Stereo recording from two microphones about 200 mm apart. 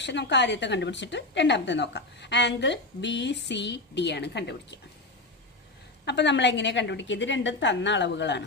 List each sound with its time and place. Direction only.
0.0 s speech: 60° left (ahead or behind)
6.1 s speech: 60° left (ahead or behind)